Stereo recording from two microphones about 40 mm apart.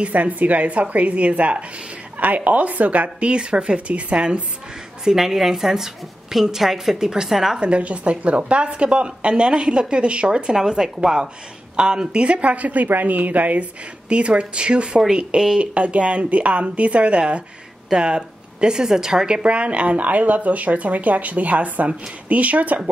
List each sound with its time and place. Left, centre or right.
0.0 s speech: right
5.0 s a woman's voice: centre
7.5 s speech: right
10.5 s a woman's voice: centre
19.4 s speech: right